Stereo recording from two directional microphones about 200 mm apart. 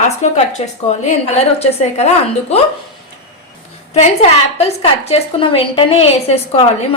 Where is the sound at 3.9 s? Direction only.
35° left (ahead or behind).